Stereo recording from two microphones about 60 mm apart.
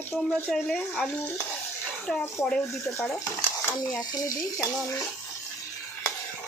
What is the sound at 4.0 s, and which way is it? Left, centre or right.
Speech, left.